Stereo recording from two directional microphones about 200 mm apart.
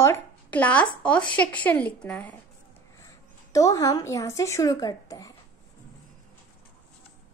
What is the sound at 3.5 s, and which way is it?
A woman's voice, 15° left (ahead or behind).